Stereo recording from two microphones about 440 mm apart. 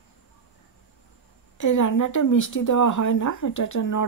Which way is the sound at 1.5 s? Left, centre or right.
Left.